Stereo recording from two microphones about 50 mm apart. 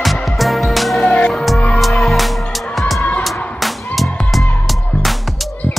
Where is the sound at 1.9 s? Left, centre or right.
Centre.